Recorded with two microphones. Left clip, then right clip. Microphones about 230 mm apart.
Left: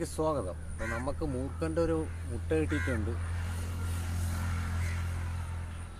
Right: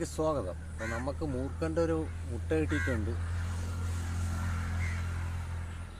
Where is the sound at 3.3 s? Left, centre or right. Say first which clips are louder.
Even; left.